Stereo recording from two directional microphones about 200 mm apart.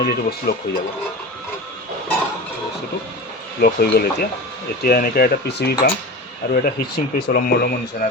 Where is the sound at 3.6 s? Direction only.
50° left (ahead or behind).